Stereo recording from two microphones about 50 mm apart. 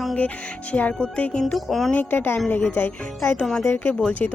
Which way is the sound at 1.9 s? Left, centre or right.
Left.